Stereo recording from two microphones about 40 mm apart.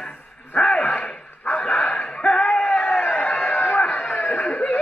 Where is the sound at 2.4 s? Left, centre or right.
Left.